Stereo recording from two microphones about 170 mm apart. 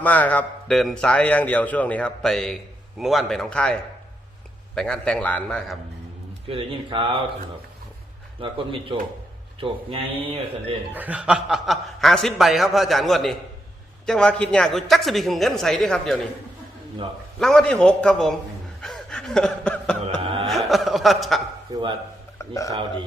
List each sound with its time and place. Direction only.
0.0 s a man's voice: 10° left (ahead or behind)
6.5 s speech: 30° right (ahead or behind)
8.4 s speech: 30° right (ahead or behind)
10.9 s a man's voice: 10° right (ahead or behind)
17.4 s a man's voice: 5° left (ahead or behind)
18.8 s snicker: 5° left (ahead or behind)
20.1 s cough: 30° right (ahead or behind)
20.5 s speech: centre (ahead or behind)
22.4 s speech: 20° left (ahead or behind)